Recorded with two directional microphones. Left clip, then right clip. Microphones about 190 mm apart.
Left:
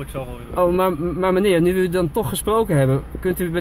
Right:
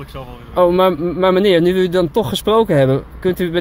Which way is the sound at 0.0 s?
Centre (ahead or behind).